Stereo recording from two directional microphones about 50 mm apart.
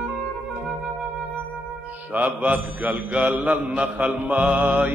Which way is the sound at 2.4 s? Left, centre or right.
Right.